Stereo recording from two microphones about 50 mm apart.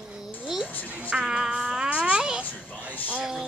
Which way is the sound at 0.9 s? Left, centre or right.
Right.